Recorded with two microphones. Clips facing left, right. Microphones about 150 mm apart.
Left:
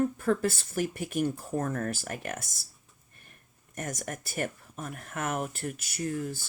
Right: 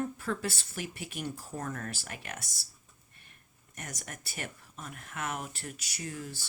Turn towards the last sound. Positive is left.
turn(degrees=50)  # may be behind; listen again after turning